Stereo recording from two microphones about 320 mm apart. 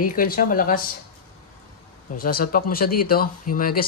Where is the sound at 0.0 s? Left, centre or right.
Left.